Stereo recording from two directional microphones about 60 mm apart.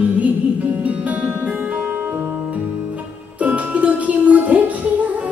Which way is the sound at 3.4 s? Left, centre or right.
Right.